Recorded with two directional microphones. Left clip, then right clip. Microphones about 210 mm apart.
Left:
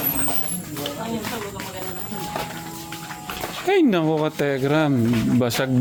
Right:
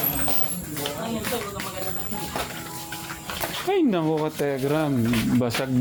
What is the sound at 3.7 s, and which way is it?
Speech, 25° left (ahead or behind).